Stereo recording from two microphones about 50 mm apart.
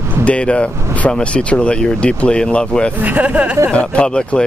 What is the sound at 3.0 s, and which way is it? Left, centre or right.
Speech, right.